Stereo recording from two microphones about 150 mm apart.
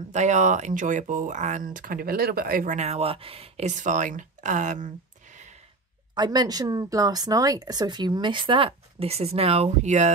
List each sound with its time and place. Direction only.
0.1 s speech: 55° right (ahead or behind)
6.1 s speech: 30° right (ahead or behind); by 10.1 s 50° right (ahead or behind)